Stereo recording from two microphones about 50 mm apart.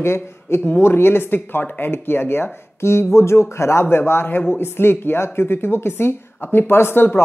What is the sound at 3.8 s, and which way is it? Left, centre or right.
Speech, left.